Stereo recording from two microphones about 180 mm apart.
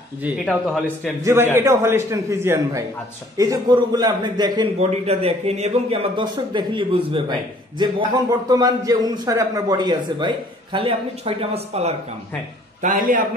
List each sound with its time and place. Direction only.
1.2 s a man's voice: 10° right (ahead or behind)
4.7 s a man's voice: 35° right (ahead or behind)
12.8 s a man's voice: 45° right (ahead or behind)